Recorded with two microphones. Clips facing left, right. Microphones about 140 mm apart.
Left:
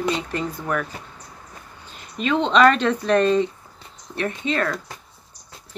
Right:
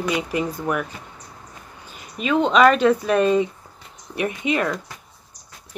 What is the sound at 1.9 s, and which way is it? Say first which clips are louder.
Speech: right 1 dB; 10° right (ahead or behind).